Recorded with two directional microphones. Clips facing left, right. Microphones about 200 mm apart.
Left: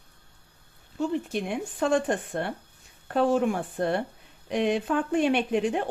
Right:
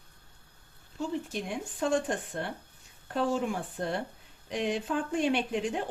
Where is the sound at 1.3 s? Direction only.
65° left (ahead or behind).